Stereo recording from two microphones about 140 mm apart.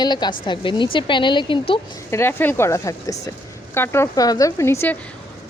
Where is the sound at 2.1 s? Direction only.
15° left (ahead or behind).